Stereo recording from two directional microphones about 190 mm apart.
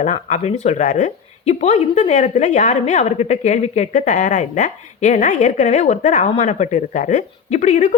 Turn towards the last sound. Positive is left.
turn(degrees=40)  # may be behind; listen again after turning